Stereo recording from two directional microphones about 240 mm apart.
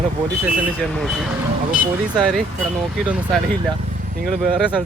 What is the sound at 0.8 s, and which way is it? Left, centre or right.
Speech, centre.